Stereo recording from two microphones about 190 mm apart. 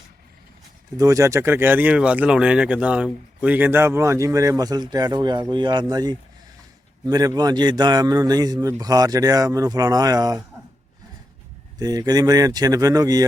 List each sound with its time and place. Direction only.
0.9 s a man's voice: 15° right (ahead or behind)
11.8 s a man's voice: 20° right (ahead or behind)